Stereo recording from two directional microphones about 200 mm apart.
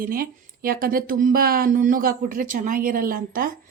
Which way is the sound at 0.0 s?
45° right (ahead or behind).